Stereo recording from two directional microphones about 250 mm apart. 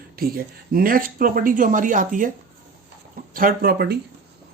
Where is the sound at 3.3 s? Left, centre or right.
Right.